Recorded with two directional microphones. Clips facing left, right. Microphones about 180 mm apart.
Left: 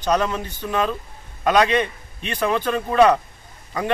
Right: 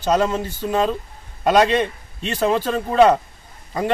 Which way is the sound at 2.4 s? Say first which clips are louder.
Right 2 dB; 25° right (ahead or behind).